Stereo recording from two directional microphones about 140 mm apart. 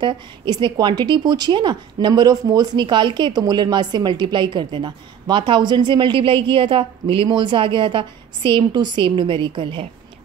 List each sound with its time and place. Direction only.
0.0 s a woman's voice: 35° right (ahead or behind)